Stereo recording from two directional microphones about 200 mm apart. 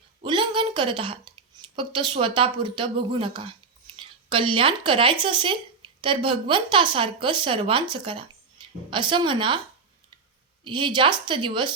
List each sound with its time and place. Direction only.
0.2 s a woman's voice: 25° right (ahead or behind)
10.6 s a woman's voice: 25° right (ahead or behind)